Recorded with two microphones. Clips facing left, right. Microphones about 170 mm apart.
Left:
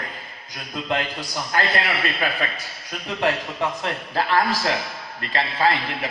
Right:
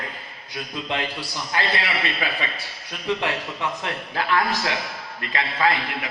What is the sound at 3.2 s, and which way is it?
A man's voice, 35° left (ahead or behind).